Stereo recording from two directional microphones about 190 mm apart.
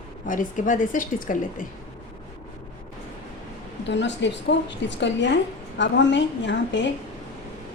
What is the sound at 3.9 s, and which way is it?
A woman's voice, 70° left (ahead or behind).